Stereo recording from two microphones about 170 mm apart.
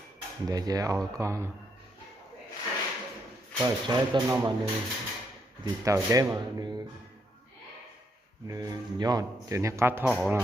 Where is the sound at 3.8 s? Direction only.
25° right (ahead or behind).